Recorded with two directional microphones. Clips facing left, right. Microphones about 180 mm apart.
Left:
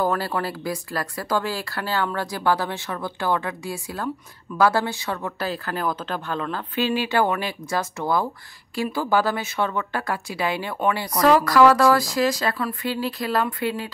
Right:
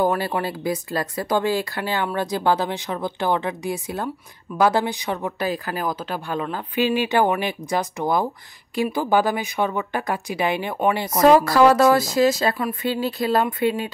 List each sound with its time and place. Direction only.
0.0 s a woman's voice: 15° right (ahead or behind)